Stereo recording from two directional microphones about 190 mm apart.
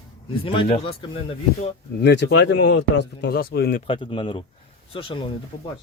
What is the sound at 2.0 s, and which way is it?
Speech, 60° left (ahead or behind).